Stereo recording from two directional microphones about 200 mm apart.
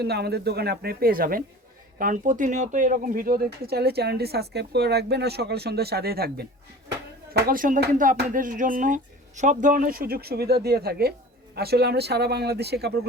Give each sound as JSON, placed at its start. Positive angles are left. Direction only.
{"t": 0.0, "sound": "speech", "side_deg": -55}